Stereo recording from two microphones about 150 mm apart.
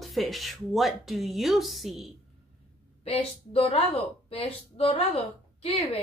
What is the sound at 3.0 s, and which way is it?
A woman's voice, 40° left (ahead or behind).